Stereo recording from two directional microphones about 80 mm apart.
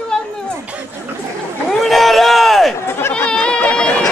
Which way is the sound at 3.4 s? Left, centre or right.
Centre.